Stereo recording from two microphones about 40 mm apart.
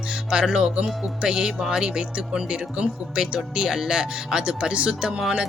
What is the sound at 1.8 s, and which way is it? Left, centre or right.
Speech, right.